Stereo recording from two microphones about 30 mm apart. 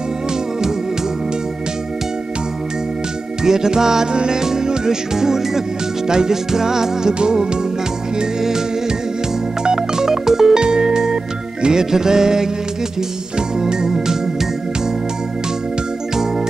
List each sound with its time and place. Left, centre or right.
3.4 s music: centre
9.6 s music: right
13.6 s organ: right